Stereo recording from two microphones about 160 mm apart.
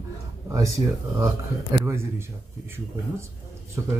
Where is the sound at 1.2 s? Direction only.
20° right (ahead or behind).